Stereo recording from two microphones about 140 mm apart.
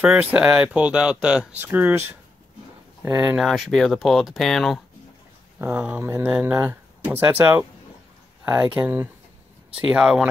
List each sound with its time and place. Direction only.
0.0 s speech: 10° right (ahead or behind)
3.3 s speech: centre (ahead or behind)
5.6 s speech: 15° right (ahead or behind)